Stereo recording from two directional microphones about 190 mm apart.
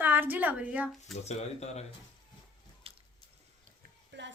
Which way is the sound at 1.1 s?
35° left (ahead or behind).